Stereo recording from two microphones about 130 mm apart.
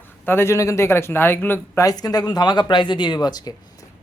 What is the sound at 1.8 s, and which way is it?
Speech, 30° left (ahead or behind).